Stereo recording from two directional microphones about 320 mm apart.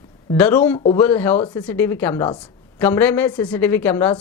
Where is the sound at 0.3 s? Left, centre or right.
Centre.